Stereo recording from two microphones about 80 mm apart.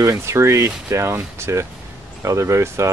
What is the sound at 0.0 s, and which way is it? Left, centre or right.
Speech, right.